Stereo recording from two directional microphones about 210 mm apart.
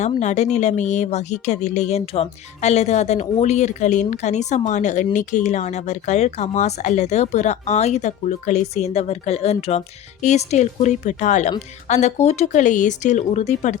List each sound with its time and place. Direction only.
0.2 s speech: 35° left (ahead or behind)